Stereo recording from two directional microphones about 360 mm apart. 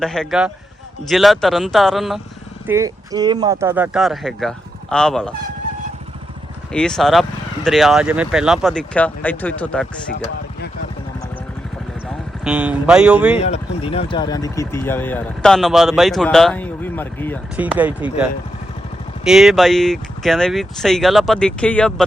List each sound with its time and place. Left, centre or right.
0.0 s speech: centre
6.7 s speech: centre
12.0 s speech: centre
13.4 s speech: centre